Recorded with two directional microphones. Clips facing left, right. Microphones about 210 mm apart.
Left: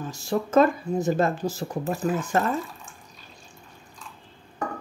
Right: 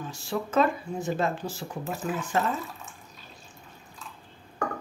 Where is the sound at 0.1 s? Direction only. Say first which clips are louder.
Left 6 dB; 45° left (ahead or behind).